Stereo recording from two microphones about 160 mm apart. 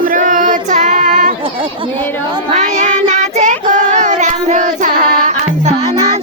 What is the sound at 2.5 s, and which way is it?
Child singing, 45° right (ahead or behind).